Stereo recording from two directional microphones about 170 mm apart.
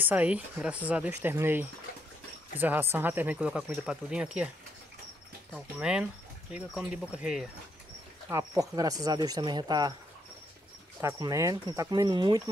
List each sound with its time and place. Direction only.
0.0 s speech: 10° right (ahead or behind)
5.5 s speech: 5° right (ahead or behind)
8.3 s speech: 20° right (ahead or behind)
11.0 s speech: 20° right (ahead or behind)